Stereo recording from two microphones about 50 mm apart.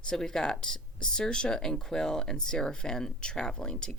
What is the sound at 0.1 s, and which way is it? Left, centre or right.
Speech, centre.